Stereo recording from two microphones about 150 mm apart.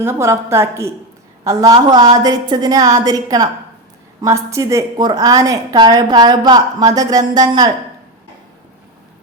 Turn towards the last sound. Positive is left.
turn(degrees=-25)  # may be behind; listen again after turning